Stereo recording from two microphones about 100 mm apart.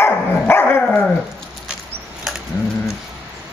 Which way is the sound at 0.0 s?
20° left (ahead or behind).